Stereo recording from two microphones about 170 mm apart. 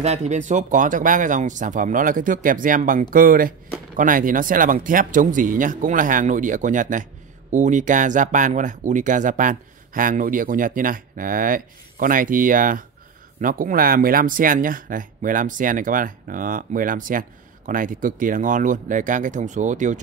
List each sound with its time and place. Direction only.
0.0 s speech: 40° right (ahead or behind)